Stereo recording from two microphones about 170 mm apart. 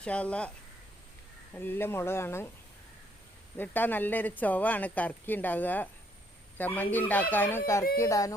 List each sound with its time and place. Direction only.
0.0 s speech: 5° left (ahead or behind)
1.5 s speech: 10° left (ahead or behind)
3.6 s speech: 10° left (ahead or behind)